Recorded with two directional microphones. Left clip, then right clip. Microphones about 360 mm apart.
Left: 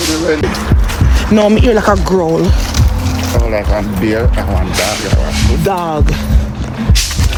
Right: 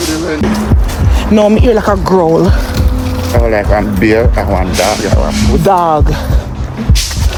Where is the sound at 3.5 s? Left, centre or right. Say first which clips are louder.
Right 6 dB; right.